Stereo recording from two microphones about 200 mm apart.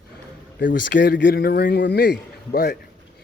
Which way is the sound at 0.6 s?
60° left (ahead or behind).